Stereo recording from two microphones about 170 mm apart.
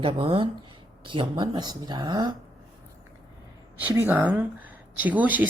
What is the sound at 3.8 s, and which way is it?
Speech, 10° right (ahead or behind).